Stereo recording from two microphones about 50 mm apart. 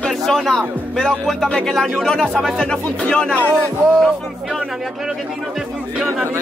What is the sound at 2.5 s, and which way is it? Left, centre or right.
Speech, centre.